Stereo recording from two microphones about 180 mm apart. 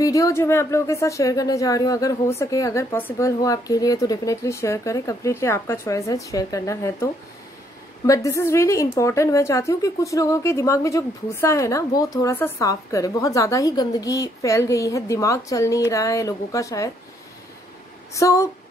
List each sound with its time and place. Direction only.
0.0 s a woman's voice: 20° left (ahead or behind)
8.1 s a woman's voice: 15° left (ahead or behind)
18.1 s a woman's voice: 15° left (ahead or behind)